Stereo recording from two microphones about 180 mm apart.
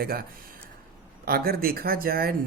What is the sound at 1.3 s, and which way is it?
Speech, 55° right (ahead or behind).